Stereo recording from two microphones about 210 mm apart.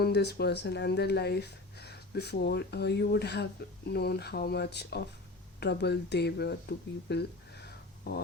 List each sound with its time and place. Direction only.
0.0 s speech: 50° left (ahead or behind)